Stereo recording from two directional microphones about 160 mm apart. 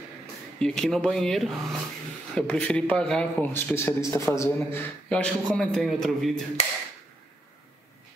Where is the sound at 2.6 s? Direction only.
5° left (ahead or behind).